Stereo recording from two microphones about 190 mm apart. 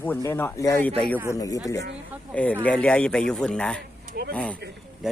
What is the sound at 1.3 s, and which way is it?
Speech, 20° left (ahead or behind).